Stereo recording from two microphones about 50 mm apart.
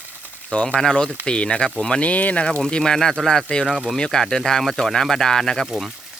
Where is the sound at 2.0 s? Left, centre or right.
Left.